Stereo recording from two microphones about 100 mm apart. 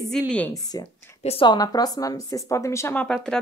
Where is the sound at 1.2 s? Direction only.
90° left.